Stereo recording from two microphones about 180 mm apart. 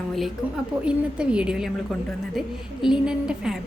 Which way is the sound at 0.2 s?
5° right (ahead or behind).